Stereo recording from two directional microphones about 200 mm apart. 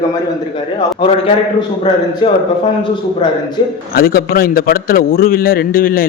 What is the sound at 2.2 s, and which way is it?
Speech, 25° left (ahead or behind).